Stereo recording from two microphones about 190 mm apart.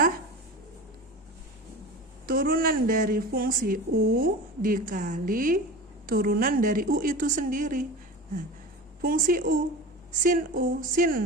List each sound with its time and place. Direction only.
2.2 s a woman's voice: 50° right (ahead or behind)
9.0 s a woman's voice: 45° right (ahead or behind)